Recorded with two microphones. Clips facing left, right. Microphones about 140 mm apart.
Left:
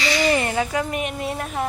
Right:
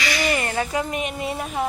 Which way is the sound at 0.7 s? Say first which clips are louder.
Left 1 dB; centre (ahead or behind).